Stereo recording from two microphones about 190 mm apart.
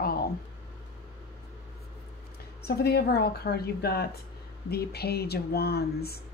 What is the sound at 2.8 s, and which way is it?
A woman's voice, 55° left (ahead or behind).